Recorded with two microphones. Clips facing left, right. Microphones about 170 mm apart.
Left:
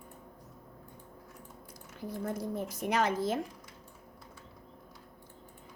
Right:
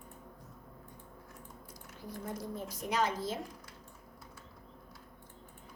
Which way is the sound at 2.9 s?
55° left (ahead or behind).